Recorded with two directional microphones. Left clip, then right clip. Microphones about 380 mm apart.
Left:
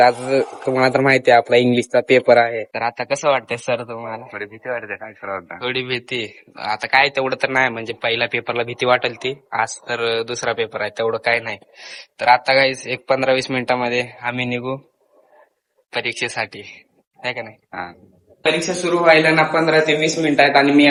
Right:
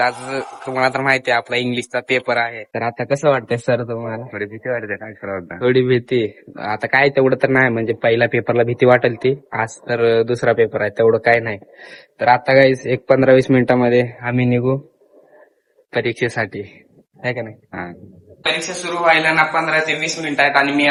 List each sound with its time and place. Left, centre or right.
0.0 s speech: centre
2.7 s speech: centre
5.5 s speech: centre
15.9 s speech: centre
18.5 s speech: centre